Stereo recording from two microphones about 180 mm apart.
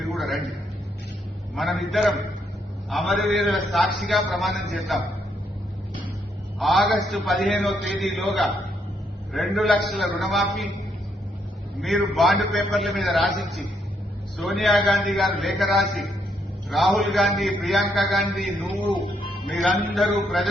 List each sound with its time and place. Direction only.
0.0 s a sound: centre (ahead or behind)
1.5 s a man's voice: centre (ahead or behind)
6.6 s a man's voice: centre (ahead or behind)
11.8 s a man's voice: centre (ahead or behind)
20.0 s a man's voice: centre (ahead or behind)